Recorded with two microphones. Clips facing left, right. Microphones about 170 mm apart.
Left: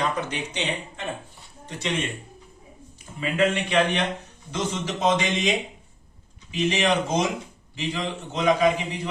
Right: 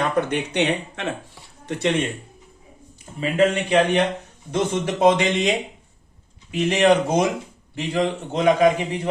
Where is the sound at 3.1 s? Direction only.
30° right (ahead or behind).